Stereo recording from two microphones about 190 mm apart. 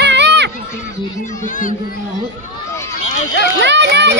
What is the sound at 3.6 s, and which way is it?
Speech, 65° right (ahead or behind).